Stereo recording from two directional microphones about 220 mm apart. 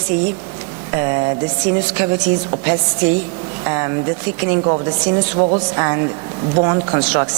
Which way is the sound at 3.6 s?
20° right (ahead or behind).